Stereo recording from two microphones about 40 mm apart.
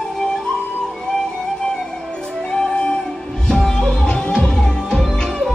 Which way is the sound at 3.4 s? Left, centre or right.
Centre.